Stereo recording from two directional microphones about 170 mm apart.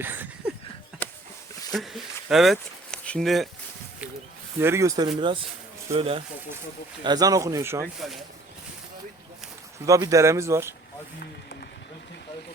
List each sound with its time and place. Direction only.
0.0 s a sound: 10° right (ahead or behind)
1.0 s a sound: 10° left (ahead or behind)
1.7 s speech: centre (ahead or behind)
4.6 s speech: 15° right (ahead or behind); by 6.2 s 35° right (ahead or behind)
7.0 s speech: 25° right (ahead or behind)
9.8 s speech: 20° right (ahead or behind)